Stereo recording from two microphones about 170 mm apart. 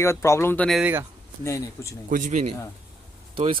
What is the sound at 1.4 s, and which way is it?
Speech, 15° left (ahead or behind).